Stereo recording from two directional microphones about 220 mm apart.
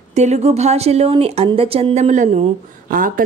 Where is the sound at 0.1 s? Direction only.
30° right (ahead or behind).